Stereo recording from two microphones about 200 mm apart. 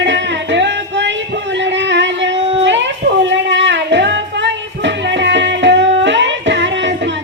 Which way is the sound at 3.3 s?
65° right (ahead or behind).